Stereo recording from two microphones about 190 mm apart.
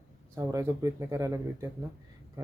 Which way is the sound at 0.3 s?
15° right (ahead or behind).